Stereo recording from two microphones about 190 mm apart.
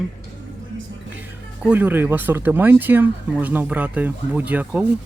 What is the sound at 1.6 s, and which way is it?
Speech, 10° right (ahead or behind).